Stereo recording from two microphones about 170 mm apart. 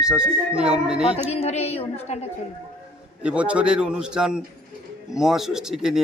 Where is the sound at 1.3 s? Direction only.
35° left (ahead or behind).